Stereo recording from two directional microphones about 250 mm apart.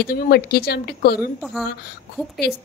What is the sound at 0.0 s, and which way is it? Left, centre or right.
A woman's voice, left.